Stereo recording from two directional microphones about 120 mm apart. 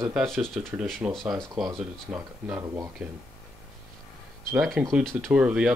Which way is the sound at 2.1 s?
10° right (ahead or behind).